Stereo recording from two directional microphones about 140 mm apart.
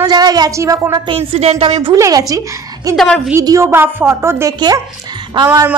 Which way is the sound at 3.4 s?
20° right (ahead or behind).